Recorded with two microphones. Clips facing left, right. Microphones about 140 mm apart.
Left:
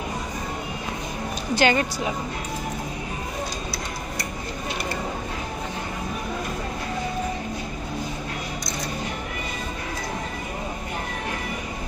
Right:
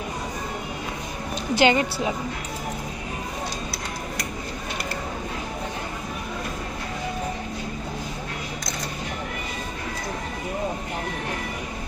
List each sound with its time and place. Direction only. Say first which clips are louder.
1.5 s a woman's voice: right 1 dB; 25° right (ahead or behind)